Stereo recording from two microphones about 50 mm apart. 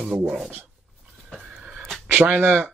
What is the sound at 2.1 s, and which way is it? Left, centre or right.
Speech, right.